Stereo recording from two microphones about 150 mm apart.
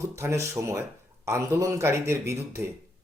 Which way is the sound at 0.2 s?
20° right (ahead or behind).